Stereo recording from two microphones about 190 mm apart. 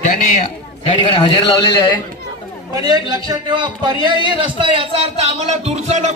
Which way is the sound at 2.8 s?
20° right (ahead or behind).